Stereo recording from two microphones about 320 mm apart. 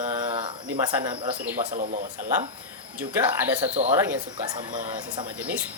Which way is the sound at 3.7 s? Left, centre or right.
Right.